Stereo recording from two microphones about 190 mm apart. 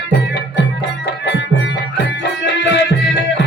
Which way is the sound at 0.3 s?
70° left (ahead or behind).